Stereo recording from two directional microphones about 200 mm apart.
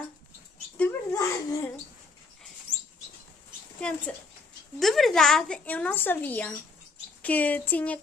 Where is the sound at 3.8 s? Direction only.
5° left (ahead or behind).